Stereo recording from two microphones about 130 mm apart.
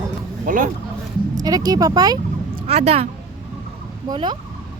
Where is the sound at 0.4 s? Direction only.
90° right.